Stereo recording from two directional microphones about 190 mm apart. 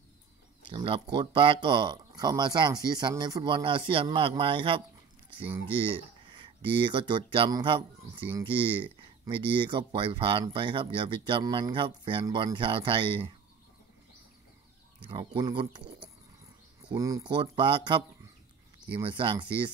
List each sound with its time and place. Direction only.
0.7 s speech: 25° right (ahead or behind)
5.9 s speech: 25° right (ahead or behind)
15.0 s speech: 25° right (ahead or behind)
16.9 s speech: 20° right (ahead or behind)